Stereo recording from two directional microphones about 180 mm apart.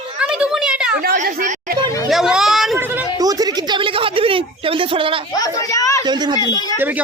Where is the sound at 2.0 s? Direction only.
Centre (ahead or behind).